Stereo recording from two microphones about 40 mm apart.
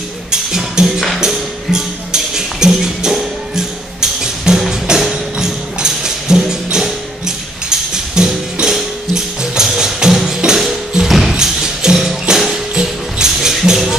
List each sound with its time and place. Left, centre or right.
0.3 s music: centre